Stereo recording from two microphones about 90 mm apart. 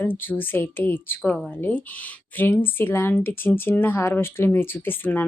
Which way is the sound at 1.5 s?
20° left (ahead or behind).